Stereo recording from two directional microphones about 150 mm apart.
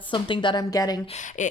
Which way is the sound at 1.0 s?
50° left (ahead or behind).